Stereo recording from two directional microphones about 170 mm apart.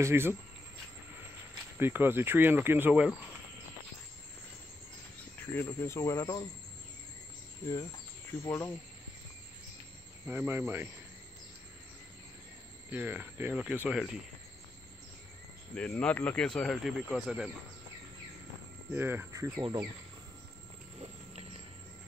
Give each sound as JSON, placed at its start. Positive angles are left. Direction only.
{"t": 0.0, "sound": "speech", "side_deg": -15}
{"t": 1.8, "sound": "speech", "side_deg": -10}
{"t": 5.4, "sound": "speech", "side_deg": 10}
{"t": 8.5, "sound": "speech", "side_deg": 10}
{"t": 10.2, "sound": "speech", "side_deg": -10}
{"t": 12.9, "sound": "speech", "side_deg": -10}
{"t": 15.7, "sound": "speech", "side_deg": 5}
{"t": 18.9, "sound": "cricket", "side_deg": -10}
{"t": 19.6, "sound": "speech", "side_deg": -25}